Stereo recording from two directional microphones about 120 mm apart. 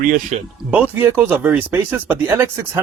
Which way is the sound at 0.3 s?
70° right (ahead or behind).